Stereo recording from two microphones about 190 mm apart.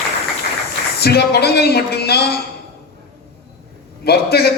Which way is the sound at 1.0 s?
55° left (ahead or behind).